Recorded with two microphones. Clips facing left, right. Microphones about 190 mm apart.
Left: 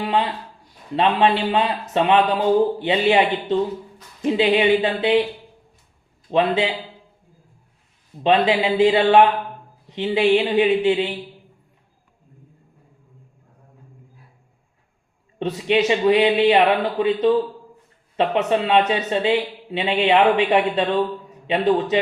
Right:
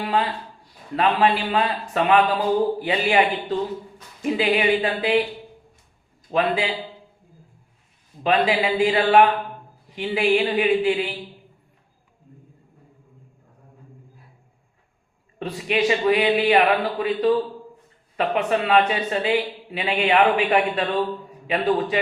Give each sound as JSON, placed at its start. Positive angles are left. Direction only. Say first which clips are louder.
{"t": 0.9, "sound": "speech", "louder": "left 2 dB", "side_deg": 25}
{"t": 4.2, "sound": "speech", "louder": "left 4 dB", "side_deg": 25}
{"t": 6.3, "sound": "speech", "louder": "left 3 dB", "side_deg": 25}
{"t": 8.2, "sound": "speech", "louder": "left 3 dB", "side_deg": 25}
{"t": 15.4, "sound": "speech", "louder": "left 4 dB", "side_deg": 25}